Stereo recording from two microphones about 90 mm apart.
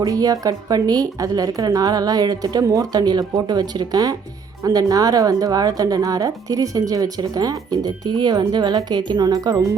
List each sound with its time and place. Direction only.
0.0 s a woman's voice: 45° right (ahead or behind)